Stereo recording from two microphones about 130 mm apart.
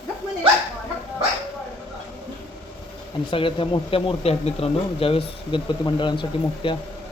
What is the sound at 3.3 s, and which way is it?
Speech, 45° left (ahead or behind).